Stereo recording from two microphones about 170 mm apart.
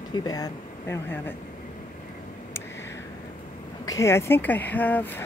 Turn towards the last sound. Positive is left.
turn(degrees=10)  # may be behind; listen again after turning